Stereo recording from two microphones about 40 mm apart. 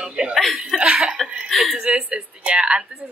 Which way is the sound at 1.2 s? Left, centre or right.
Centre.